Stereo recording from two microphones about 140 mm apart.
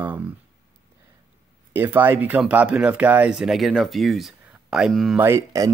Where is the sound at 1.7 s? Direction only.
15° right (ahead or behind).